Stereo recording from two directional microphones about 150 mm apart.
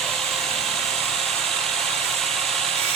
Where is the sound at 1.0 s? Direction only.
Centre (ahead or behind).